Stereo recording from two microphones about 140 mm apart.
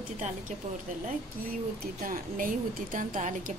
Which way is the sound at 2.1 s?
75° right (ahead or behind).